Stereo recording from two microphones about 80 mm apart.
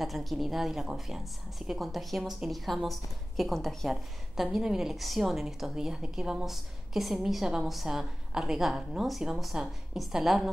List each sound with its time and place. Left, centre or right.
0.0 s a woman's voice: centre